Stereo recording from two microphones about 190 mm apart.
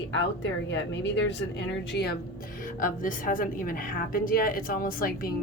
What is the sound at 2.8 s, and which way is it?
A woman's voice, 45° left (ahead or behind).